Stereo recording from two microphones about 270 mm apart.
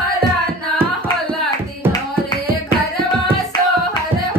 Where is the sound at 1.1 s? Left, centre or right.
Centre.